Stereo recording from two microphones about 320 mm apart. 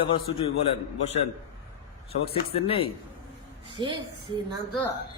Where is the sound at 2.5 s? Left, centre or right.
Centre.